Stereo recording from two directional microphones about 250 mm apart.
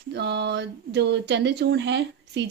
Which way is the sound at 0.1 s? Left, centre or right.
Right.